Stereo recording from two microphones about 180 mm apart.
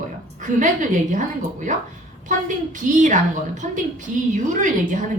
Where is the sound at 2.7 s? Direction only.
45° right (ahead or behind).